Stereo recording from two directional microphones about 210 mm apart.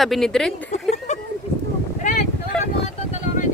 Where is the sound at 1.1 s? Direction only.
35° left (ahead or behind).